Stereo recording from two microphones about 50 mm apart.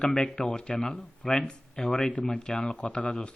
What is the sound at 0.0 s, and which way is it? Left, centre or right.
Speech, centre.